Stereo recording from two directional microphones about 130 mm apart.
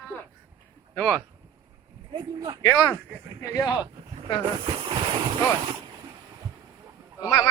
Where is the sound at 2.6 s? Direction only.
20° left (ahead or behind).